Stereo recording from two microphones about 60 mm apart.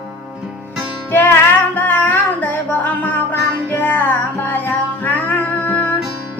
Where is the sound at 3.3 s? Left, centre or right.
Left.